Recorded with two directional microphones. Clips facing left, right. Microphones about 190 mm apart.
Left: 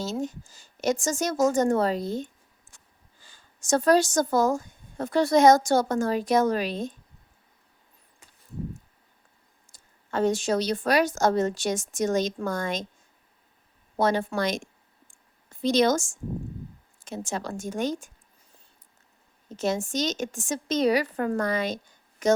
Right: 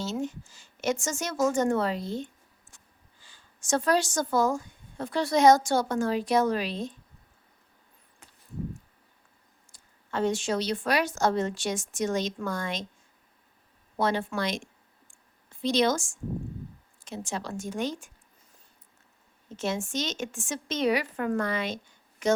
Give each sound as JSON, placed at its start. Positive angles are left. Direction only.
{"t": 0.0, "sound": "a woman's voice", "side_deg": 40}
{"t": 9.7, "sound": "speech", "side_deg": 45}
{"t": 14.0, "sound": "a sound", "side_deg": 40}
{"t": 17.0, "sound": "speech", "side_deg": 45}
{"t": 19.5, "sound": "speech", "side_deg": 40}